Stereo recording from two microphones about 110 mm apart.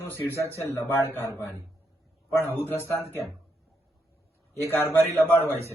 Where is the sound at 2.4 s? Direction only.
20° left (ahead or behind).